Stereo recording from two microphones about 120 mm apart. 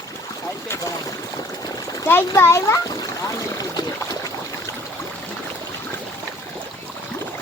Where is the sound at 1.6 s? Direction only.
30° left (ahead or behind).